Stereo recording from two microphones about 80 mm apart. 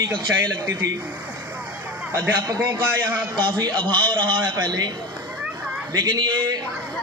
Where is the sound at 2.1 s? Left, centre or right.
Right.